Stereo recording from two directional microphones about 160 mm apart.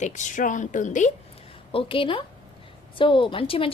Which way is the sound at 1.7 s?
35° left (ahead or behind).